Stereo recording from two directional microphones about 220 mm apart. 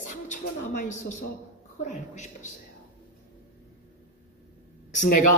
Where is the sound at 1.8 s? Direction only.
30° left (ahead or behind).